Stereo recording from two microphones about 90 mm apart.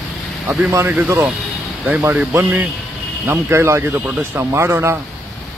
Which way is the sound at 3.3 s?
30° right (ahead or behind).